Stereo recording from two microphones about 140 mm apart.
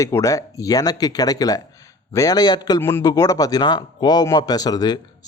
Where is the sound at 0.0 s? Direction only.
20° left (ahead or behind).